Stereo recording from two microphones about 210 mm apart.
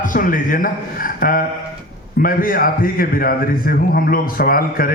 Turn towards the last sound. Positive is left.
turn(degrees=45)  # may be behind; listen again after turning